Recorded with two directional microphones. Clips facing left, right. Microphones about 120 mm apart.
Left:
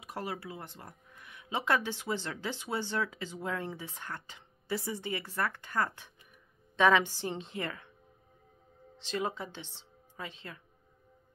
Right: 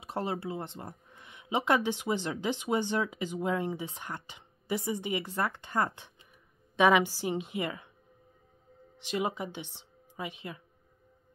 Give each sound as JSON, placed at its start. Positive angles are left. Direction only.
{"t": 0.0, "sound": "speech", "side_deg": -25}
{"t": 8.9, "sound": "speech", "side_deg": -15}